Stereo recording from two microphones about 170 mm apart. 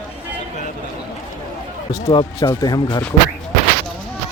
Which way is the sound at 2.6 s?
25° left (ahead or behind).